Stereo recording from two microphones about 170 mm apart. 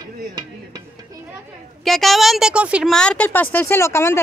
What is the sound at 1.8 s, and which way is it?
A woman's voice, centre (ahead or behind).